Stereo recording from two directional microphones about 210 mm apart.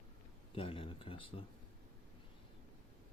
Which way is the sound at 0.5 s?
25° left (ahead or behind).